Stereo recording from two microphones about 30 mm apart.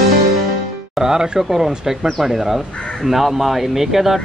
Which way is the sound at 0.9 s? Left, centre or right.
Right.